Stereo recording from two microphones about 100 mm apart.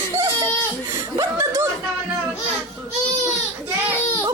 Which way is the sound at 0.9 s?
25° right (ahead or behind).